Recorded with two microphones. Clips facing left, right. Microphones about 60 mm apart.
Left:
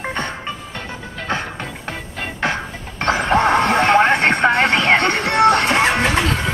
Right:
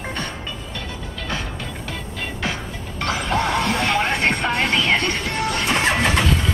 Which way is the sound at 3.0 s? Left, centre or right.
Left.